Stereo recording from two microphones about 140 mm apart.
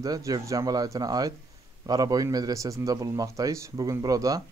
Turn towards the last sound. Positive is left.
turn(degrees=-25)  # may be behind; listen again after turning